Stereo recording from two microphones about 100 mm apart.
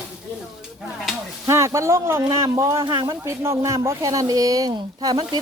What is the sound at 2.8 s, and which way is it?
Speech, 40° right (ahead or behind).